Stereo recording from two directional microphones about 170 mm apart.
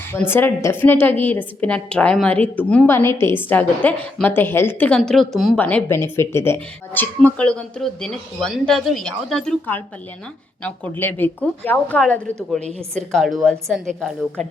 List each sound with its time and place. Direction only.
0.1 s a woman's voice: 15° left (ahead or behind)